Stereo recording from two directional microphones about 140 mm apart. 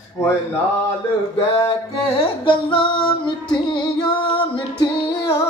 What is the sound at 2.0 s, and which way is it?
Music, 40° left (ahead or behind).